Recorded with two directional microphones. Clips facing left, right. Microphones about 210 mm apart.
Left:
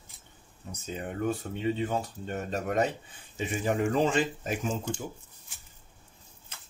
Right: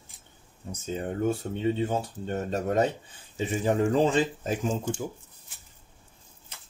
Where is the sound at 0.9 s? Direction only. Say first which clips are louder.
Right 3 dB; 30° right (ahead or behind).